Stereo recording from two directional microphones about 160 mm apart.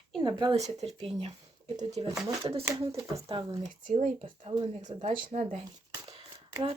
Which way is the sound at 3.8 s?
50° right (ahead or behind).